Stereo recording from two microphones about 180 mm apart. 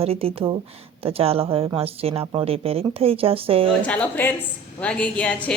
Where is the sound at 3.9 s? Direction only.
10° left (ahead or behind).